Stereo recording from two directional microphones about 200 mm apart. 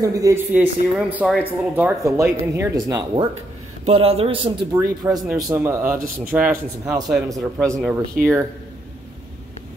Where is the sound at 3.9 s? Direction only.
30° right (ahead or behind).